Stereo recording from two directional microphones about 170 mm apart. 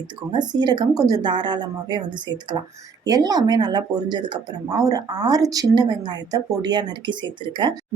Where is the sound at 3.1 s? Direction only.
20° right (ahead or behind).